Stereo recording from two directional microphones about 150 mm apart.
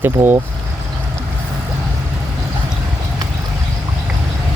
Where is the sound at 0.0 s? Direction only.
15° right (ahead or behind).